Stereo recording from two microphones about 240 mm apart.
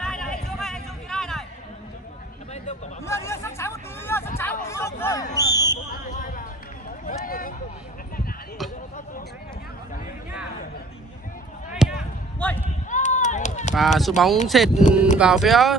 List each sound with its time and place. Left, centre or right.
0.0 s a sound: centre
3.1 s hubbub: centre
6.0 s basketball bounce: left
7.1 s a sound: left
11.8 s basketball bounce: centre
12.4 s a sound: centre
12.9 s run: left
13.7 s speech: centre
14.7 s speech: left
15.1 s speech: centre